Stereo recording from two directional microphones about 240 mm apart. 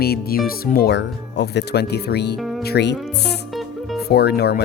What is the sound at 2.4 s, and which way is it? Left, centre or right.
Music, centre.